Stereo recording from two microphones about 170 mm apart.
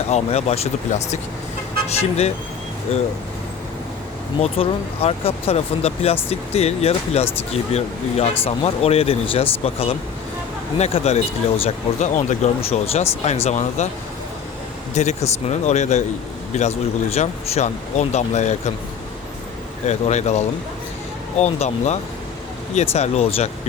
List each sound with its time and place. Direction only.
0.1 s speech: 40° left (ahead or behind)
4.4 s speech: 35° left (ahead or behind)
14.9 s speech: 40° left (ahead or behind)
19.9 s speech: 40° left (ahead or behind)